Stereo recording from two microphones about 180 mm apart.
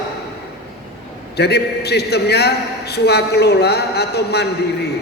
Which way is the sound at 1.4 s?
65° left (ahead or behind).